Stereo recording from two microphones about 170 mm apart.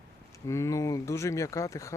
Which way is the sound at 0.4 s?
20° left (ahead or behind).